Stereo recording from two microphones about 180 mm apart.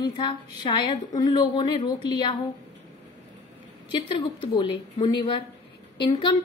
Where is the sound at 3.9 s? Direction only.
25° left (ahead or behind).